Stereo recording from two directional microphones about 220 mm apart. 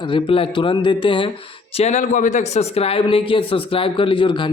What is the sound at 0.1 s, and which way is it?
Speech, 25° left (ahead or behind).